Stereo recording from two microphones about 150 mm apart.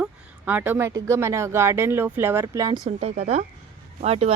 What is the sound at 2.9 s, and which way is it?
Speech, 45° right (ahead or behind).